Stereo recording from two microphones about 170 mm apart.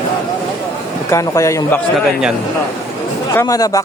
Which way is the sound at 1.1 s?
20° left (ahead or behind).